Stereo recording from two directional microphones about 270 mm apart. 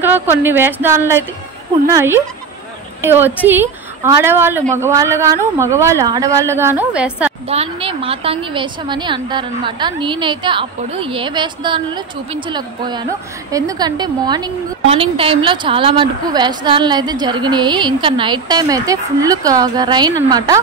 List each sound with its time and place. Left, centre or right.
0.0 s a woman's voice: centre
7.4 s a woman's voice: right